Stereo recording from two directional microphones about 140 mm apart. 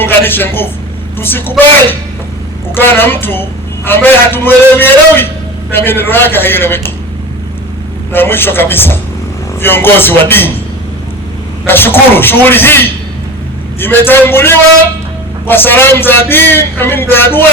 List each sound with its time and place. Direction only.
0.0 s a man's voice: 15° left (ahead or behind)
8.1 s a man's voice: 15° left (ahead or behind)
11.6 s a man's voice: 15° left (ahead or behind)